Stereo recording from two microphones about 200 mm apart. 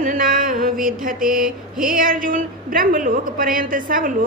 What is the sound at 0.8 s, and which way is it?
A woman's voice, 45° right (ahead or behind).